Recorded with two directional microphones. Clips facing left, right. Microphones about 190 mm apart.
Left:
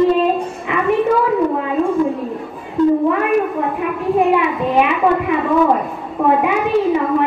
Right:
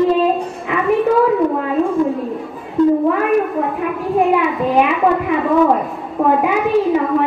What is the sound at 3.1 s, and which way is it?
A child's voice, centre (ahead or behind).